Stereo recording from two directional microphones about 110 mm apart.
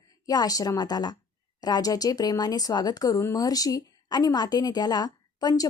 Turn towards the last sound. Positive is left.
turn(degrees=40)  # may be behind; listen again after turning